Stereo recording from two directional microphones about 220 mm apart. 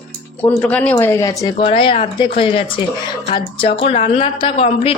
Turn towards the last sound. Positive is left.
turn(degrees=25)  # may be behind; listen again after turning